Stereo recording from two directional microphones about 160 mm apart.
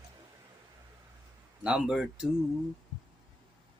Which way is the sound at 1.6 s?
5° right (ahead or behind).